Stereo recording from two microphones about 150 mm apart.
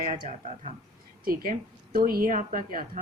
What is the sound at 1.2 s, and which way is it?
A woman's voice, 75° right (ahead or behind).